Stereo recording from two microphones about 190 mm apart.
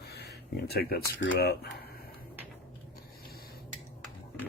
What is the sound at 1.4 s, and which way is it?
Speech, 55° left (ahead or behind).